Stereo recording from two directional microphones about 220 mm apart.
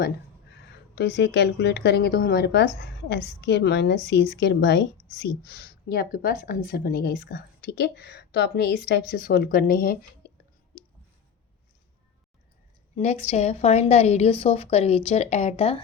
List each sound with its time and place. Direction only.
0.9 s speech: 50° left (ahead or behind)
13.0 s a woman's voice: 30° left (ahead or behind)